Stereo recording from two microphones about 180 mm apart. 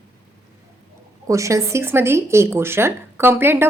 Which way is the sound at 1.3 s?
15° right (ahead or behind).